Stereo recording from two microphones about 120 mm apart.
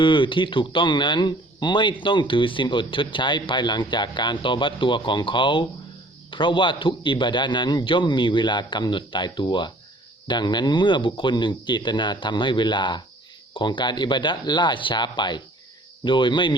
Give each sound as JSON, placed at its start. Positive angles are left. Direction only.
{"t": 0.0, "sound": "a man's voice", "side_deg": 45}